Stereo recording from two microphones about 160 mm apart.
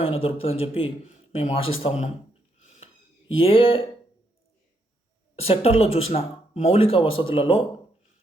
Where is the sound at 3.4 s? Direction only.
35° left (ahead or behind).